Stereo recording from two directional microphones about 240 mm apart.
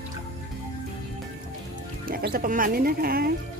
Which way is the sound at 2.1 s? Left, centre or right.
Right.